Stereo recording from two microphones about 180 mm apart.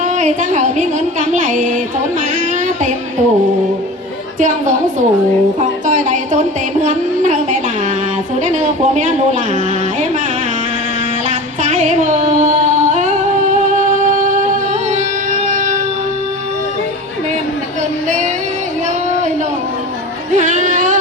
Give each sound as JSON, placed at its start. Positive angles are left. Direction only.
{"t": 0.0, "sound": "a woman's voice", "side_deg": -40}
{"t": 4.4, "sound": "a woman's voice", "side_deg": -45}
{"t": 11.3, "sound": "female singing", "side_deg": -40}
{"t": 15.3, "sound": "music", "side_deg": -45}
{"t": 20.3, "sound": "music", "side_deg": -45}